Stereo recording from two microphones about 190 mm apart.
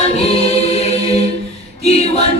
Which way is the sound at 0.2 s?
35° left (ahead or behind).